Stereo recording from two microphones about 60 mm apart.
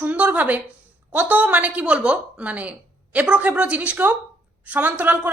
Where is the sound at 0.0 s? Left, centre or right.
Right.